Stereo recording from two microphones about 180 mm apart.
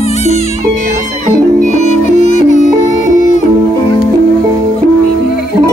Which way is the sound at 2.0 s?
40° left (ahead or behind).